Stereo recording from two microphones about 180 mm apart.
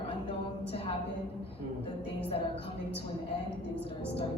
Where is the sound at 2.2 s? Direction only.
30° left (ahead or behind).